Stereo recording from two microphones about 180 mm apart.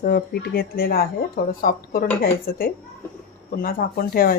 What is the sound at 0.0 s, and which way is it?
Speech, 55° left (ahead or behind).